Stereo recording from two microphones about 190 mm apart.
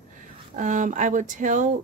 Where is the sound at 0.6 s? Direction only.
40° right (ahead or behind).